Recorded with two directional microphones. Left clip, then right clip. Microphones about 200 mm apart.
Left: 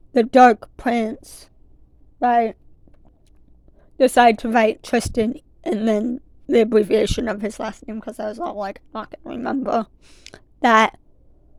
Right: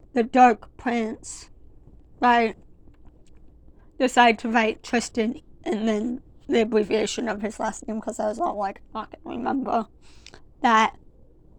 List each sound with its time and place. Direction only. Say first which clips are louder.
0.1 s a woman's voice: left 5 dB; 65° left (ahead or behind)
2.1 s speech: left 2 dB; 40° left (ahead or behind)
3.9 s a woman's voice: left 4 dB; 60° left (ahead or behind)
7.6 s speech: right 1 dB; 15° left (ahead or behind)
8.5 s speech: left 1 dB; 40° left (ahead or behind); by 11.0 s 55° left (ahead or behind)